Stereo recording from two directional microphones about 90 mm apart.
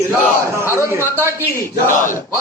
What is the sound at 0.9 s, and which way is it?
Speech, 30° right (ahead or behind).